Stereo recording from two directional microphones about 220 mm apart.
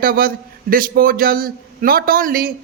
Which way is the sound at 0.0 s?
40° right (ahead or behind).